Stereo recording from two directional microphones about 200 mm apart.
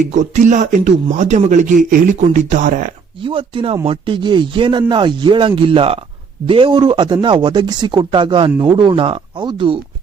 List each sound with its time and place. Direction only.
0.0 s speech: 40° right (ahead or behind)
3.2 s speech: 25° right (ahead or behind)